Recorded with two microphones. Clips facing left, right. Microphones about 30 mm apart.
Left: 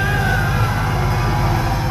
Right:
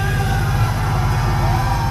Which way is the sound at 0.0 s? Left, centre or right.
Centre.